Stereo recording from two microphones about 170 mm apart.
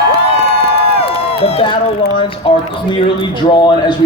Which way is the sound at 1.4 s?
35° left (ahead or behind).